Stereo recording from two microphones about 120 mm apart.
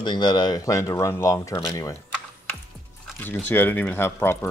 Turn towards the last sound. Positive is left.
turn(degrees=20)  # may be behind; listen again after turning